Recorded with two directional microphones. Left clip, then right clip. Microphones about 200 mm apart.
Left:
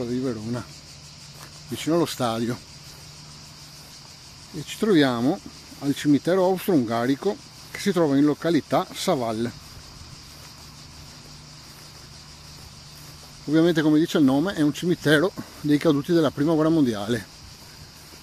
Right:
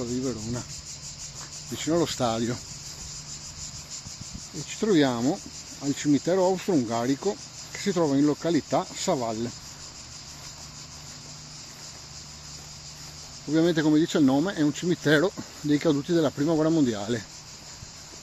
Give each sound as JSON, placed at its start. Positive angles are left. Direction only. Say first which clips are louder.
{"t": 0.0, "sound": "speech", "louder": "left 3 dB", "side_deg": 30}
{"t": 1.8, "sound": "speech", "louder": "left 2 dB", "side_deg": 25}
{"t": 2.1, "sound": "speech", "louder": "left 1 dB", "side_deg": 15}
{"t": 4.6, "sound": "speech", "louder": "left 3 dB", "side_deg": 25}
{"t": 13.5, "sound": "speech", "louder": "left 3 dB", "side_deg": 30}